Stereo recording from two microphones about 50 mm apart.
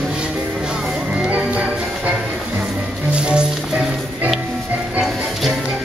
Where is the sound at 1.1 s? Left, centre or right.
Right.